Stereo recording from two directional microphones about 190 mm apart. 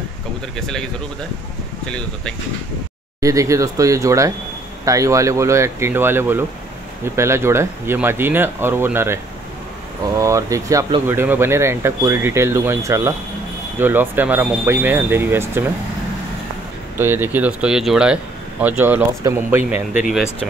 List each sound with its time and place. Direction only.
0.6 s speech: 5° left (ahead or behind)
1.9 s speech: 5° left (ahead or behind)
3.2 s speech: 15° right (ahead or behind)
17.0 s speech: 10° right (ahead or behind)